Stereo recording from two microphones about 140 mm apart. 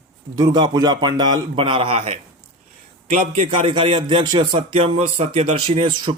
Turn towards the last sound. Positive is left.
turn(degrees=-35)  # may be behind; listen again after turning